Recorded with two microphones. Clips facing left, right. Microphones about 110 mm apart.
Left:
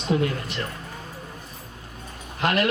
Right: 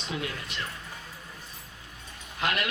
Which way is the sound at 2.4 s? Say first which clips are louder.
Left 7 dB; 40° left (ahead or behind).